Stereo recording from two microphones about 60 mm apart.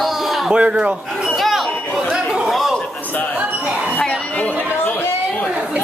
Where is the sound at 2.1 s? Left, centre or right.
Centre.